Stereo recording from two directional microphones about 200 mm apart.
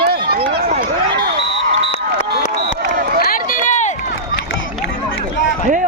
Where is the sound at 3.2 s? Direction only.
45° left (ahead or behind).